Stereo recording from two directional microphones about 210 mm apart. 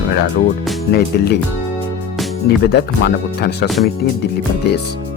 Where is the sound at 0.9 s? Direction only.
50° left (ahead or behind).